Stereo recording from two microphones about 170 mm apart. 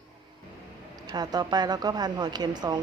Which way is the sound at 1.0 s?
25° right (ahead or behind).